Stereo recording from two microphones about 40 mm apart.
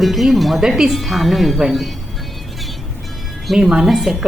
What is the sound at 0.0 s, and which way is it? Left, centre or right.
Speech, centre.